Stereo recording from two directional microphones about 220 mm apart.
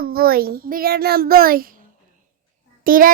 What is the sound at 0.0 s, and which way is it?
A child's voice, 45° right (ahead or behind).